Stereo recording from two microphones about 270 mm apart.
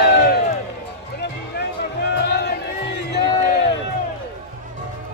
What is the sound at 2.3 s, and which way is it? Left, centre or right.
Music, left.